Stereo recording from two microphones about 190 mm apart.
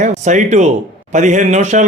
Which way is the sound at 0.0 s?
40° right (ahead or behind).